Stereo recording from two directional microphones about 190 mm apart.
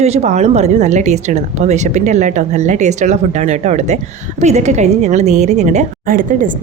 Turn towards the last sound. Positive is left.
turn(degrees=-45)  # may be behind; listen again after turning